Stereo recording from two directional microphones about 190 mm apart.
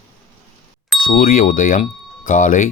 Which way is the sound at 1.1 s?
45° left (ahead or behind).